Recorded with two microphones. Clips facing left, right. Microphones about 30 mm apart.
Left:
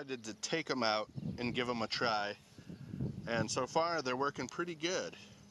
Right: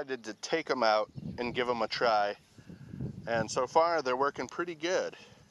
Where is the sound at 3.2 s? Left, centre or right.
Centre.